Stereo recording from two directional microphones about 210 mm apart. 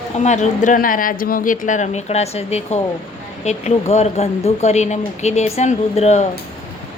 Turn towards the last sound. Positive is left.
turn(degrees=30)  # may be behind; listen again after turning